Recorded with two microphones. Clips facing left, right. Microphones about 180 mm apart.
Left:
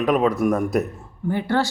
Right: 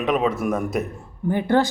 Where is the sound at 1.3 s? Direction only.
20° right (ahead or behind).